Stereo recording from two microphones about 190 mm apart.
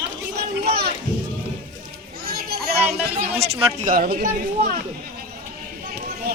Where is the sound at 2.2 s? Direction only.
55° right (ahead or behind).